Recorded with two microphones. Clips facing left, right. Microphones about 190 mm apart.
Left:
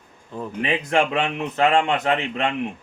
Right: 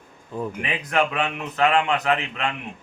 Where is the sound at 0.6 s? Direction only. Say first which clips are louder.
Left 4 dB; 25° left (ahead or behind).